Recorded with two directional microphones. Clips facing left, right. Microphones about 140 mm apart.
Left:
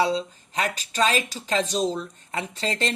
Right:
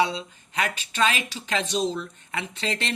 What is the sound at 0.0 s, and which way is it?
Speech, 35° left (ahead or behind).